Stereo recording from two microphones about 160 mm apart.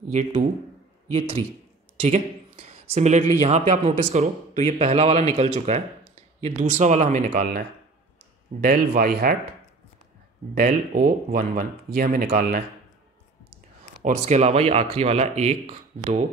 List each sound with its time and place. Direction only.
0.1 s speech: 50° right (ahead or behind)
2.0 s a sound: 45° right (ahead or behind)
3.4 s speech: 45° right (ahead or behind)
8.5 s speech: 65° right (ahead or behind)
10.5 s speech: 60° right (ahead or behind)
14.0 s speech: 45° right (ahead or behind)